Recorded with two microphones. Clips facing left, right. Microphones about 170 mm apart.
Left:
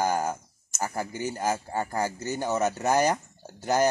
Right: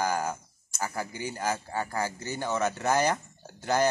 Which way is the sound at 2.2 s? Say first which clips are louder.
Left 3 dB; 40° left (ahead or behind).